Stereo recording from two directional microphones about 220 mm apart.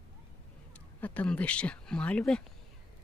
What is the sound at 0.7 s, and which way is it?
Speech, 5° left (ahead or behind).